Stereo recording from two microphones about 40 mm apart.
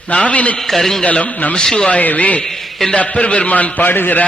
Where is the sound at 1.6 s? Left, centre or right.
Centre.